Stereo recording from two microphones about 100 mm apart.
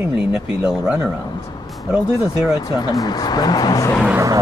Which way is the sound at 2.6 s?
45° left (ahead or behind).